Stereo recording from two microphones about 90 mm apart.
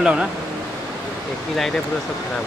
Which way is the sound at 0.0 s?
10° right (ahead or behind).